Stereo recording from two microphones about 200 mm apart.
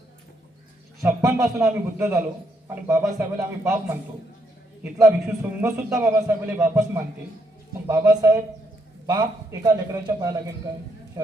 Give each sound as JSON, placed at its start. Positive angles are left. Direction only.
{"t": 1.0, "sound": "a man's voice", "side_deg": -15}
{"t": 4.8, "sound": "a man's voice", "side_deg": -15}